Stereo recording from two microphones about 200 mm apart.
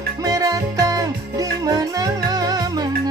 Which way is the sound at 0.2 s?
15° right (ahead or behind).